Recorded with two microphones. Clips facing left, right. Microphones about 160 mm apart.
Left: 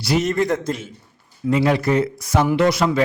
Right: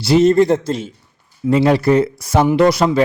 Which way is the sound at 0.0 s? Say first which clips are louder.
Right 8 dB; 30° right (ahead or behind).